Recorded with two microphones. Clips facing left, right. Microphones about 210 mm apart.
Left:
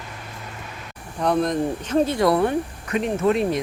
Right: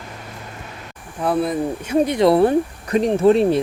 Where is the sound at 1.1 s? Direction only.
5° right (ahead or behind).